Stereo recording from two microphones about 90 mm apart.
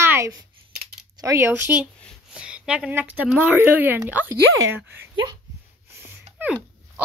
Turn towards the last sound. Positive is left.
turn(degrees=-15)  # may be behind; listen again after turning